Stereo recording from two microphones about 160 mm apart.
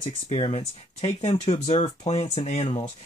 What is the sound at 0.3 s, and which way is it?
Speech, 35° left (ahead or behind).